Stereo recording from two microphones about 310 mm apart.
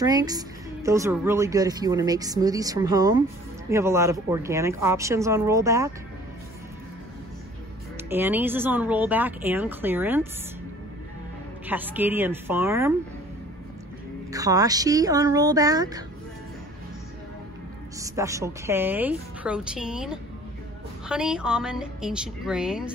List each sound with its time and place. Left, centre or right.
0.0 s a woman's voice: centre
8.1 s a woman's voice: centre
11.6 s a woman's voice: centre
14.3 s a woman's voice: centre
17.9 s a woman's voice: centre